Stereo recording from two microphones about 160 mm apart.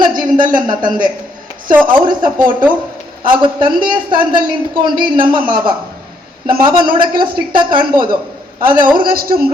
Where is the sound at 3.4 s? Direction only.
30° right (ahead or behind).